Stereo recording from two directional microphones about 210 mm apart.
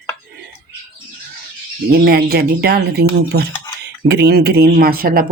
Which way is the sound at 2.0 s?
50° right (ahead or behind).